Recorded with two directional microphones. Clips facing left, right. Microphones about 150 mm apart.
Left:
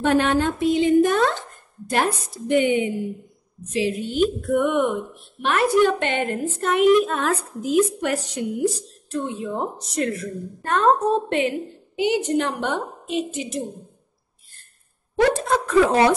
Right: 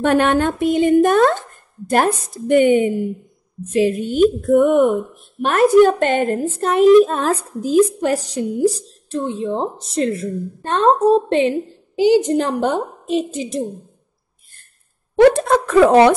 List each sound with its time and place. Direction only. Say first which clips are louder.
0.0 s a woman's voice: right 4 dB; 55° right (ahead or behind); by 13.7 s 35° right (ahead or behind)
15.1 s a woman's voice: right 7 dB; 65° right (ahead or behind)